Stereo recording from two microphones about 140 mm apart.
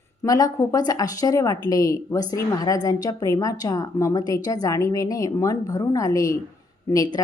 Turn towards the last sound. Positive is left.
turn(degrees=25)  # may be behind; listen again after turning